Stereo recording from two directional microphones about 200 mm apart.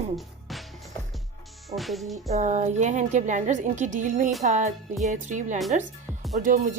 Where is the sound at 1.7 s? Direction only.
Centre (ahead or behind).